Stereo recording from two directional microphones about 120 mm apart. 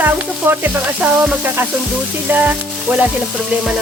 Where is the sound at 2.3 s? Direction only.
15° right (ahead or behind).